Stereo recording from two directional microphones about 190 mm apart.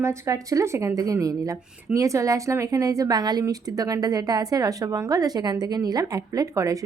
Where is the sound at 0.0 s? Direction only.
15° right (ahead or behind).